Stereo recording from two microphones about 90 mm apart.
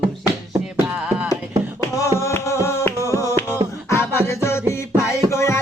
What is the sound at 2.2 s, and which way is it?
Music, 30° left (ahead or behind).